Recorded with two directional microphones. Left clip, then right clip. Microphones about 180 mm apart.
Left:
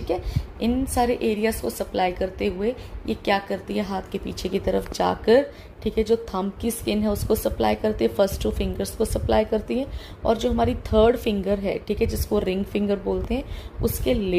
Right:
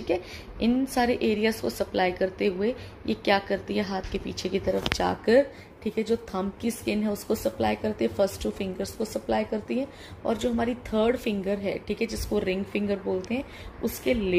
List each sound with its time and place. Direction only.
0.1 s a woman's voice: 5° left (ahead or behind); by 14.3 s 20° left (ahead or behind)